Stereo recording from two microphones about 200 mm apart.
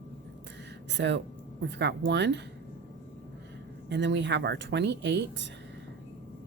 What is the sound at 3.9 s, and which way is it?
A woman's voice, 60° right (ahead or behind).